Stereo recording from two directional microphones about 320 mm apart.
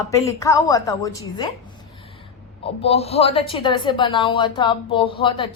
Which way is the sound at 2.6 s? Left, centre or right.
Centre.